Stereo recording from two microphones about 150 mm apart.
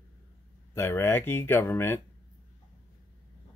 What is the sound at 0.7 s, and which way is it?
Speech, 15° left (ahead or behind).